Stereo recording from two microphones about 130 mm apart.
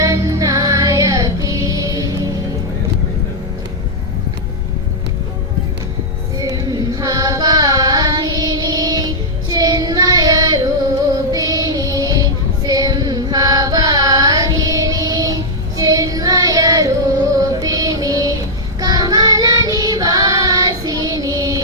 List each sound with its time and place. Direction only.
0.0 s music: 25° right (ahead or behind)
6.4 s carnatic music: 30° right (ahead or behind)
11.3 s music: 30° right (ahead or behind)
12.6 s carnatic music: 30° right (ahead or behind)
15.8 s music: 25° right (ahead or behind)
17.3 s child singing: 30° right (ahead or behind)